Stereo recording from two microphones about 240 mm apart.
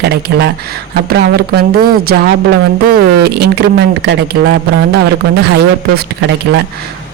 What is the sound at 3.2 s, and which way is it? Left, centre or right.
Speech, right.